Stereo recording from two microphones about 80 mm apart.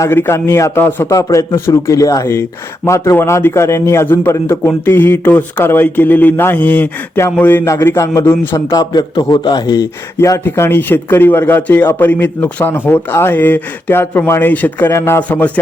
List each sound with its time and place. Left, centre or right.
0.1 s a man's voice: left
0.8 s speech: left
1.0 s a man's voice: left
7.9 s a man's voice: left
8.7 s a man's voice: left
10.2 s a man's voice: left
10.4 s speech: left
15.3 s speech: centre